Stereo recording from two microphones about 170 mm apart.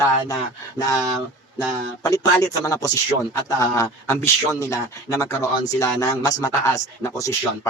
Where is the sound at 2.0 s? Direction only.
20° left (ahead or behind).